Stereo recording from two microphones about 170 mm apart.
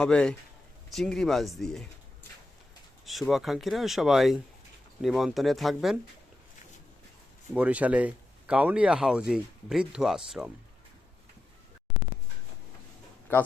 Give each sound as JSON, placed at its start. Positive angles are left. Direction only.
{"t": 0.0, "sound": "speech", "side_deg": 5}
{"t": 3.1, "sound": "speech", "side_deg": 0}
{"t": 7.5, "sound": "speech", "side_deg": -10}
{"t": 13.3, "sound": "a man's voice", "side_deg": 10}